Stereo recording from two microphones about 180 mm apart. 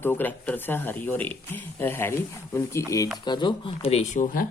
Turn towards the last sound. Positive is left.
turn(degrees=50)  # may be behind; listen again after turning